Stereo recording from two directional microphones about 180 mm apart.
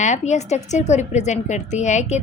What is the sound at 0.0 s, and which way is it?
A woman's voice, 40° left (ahead or behind).